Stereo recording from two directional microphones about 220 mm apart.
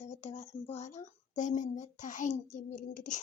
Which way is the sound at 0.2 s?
30° left (ahead or behind).